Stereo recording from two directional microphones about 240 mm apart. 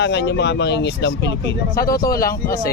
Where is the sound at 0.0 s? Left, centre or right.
Left.